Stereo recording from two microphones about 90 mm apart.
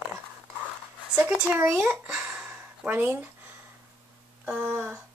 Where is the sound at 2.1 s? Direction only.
25° right (ahead or behind).